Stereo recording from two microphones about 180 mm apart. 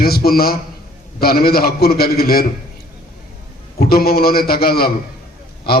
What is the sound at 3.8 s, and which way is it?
A man's voice, 55° left (ahead or behind).